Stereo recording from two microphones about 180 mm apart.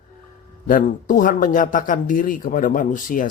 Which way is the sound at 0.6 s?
50° left (ahead or behind).